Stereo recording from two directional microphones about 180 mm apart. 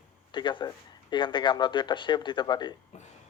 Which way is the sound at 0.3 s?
25° left (ahead or behind).